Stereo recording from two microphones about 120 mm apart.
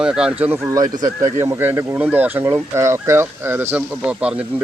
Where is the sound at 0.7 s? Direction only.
30° right (ahead or behind).